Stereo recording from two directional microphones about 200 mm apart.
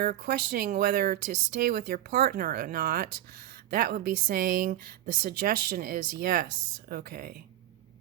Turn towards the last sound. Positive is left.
turn(degrees=-50)  # may be behind; listen again after turning